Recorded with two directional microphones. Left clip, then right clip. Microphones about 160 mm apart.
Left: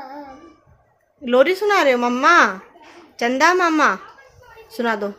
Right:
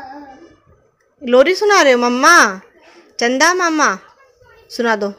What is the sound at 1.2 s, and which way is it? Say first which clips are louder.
Speech: right 4 dB; 30° right (ahead or behind).